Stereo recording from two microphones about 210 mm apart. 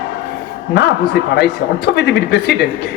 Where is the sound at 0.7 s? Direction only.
50° left (ahead or behind).